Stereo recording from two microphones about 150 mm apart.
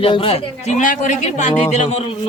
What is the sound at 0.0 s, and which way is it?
Speech, 35° left (ahead or behind).